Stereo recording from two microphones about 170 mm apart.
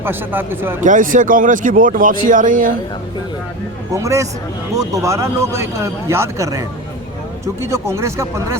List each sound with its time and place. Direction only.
0.0 s speech: 10° right (ahead or behind)
0.8 s speech: 50° right (ahead or behind)
3.9 s speech: 20° right (ahead or behind)